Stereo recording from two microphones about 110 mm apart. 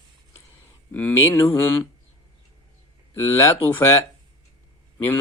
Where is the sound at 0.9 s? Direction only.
15° left (ahead or behind).